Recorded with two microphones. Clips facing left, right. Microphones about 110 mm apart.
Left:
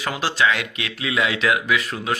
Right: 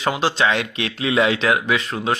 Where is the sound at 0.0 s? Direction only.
25° right (ahead or behind).